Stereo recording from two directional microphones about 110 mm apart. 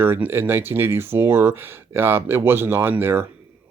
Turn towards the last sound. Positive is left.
turn(degrees=-20)  # may be behind; listen again after turning